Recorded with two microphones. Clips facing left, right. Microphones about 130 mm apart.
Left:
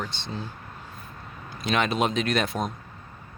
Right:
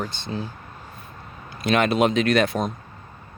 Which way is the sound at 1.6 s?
55° right (ahead or behind).